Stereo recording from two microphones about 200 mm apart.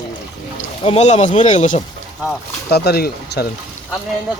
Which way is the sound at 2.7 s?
55° left (ahead or behind).